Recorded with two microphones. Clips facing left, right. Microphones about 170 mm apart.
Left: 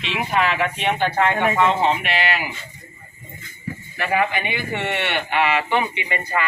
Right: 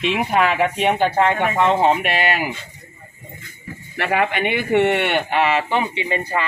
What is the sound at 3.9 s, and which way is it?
Speech, 65° right (ahead or behind).